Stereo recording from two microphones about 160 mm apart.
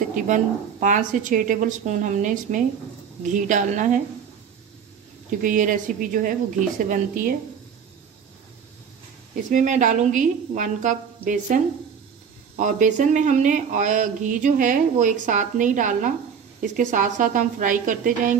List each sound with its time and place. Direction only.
0.1 s speech: 55° right (ahead or behind)
5.4 s a woman's voice: 55° right (ahead or behind)
9.5 s a woman's voice: 50° right (ahead or behind)